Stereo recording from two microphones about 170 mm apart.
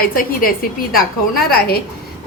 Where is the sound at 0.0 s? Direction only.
60° left (ahead or behind).